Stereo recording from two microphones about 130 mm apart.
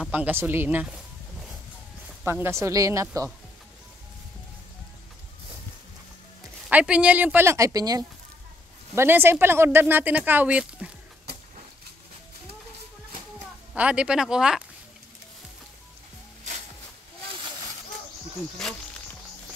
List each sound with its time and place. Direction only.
0.1 s speech: 15° right (ahead or behind)
2.2 s a woman's voice: 20° right (ahead or behind)
6.7 s speech: 10° right (ahead or behind); by 8.0 s 30° right (ahead or behind)
8.9 s speech: 15° right (ahead or behind)
13.7 s speech: 10° right (ahead or behind)